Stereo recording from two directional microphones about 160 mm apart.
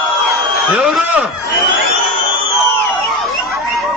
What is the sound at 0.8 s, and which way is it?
Speech, 5° right (ahead or behind).